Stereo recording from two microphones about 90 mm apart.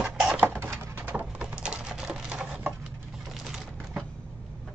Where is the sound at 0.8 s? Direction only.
25° right (ahead or behind).